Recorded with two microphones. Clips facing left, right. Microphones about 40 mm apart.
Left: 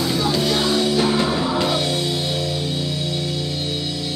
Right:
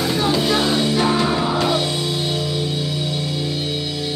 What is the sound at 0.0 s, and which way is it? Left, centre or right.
Music, right.